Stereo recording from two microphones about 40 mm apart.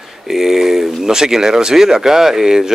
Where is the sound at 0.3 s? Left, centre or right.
Centre.